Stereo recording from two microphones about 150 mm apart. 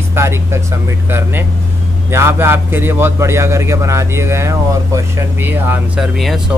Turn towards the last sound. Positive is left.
turn(degrees=0)  # may be behind; listen again after turning